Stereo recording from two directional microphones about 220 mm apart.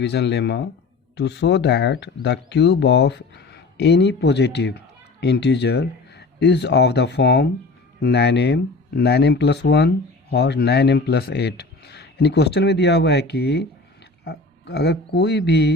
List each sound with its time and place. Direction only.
0.0 s speech: 50° left (ahead or behind)